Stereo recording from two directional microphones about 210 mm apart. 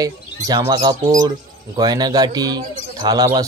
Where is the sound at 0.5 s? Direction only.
20° right (ahead or behind).